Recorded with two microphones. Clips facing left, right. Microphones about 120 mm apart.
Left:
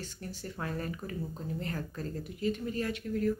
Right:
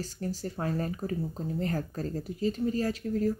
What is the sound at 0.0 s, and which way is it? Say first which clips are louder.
Speech: right 7 dB; 40° right (ahead or behind).